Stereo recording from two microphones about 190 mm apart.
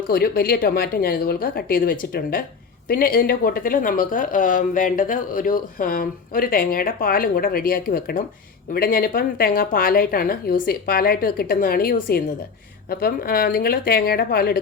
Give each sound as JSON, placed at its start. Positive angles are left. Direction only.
{"t": 0.1, "sound": "speech", "side_deg": 50}